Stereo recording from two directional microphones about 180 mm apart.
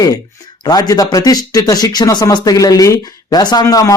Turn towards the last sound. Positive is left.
turn(degrees=20)  # may be behind; listen again after turning